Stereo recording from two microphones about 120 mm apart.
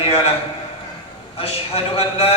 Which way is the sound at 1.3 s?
55° left (ahead or behind).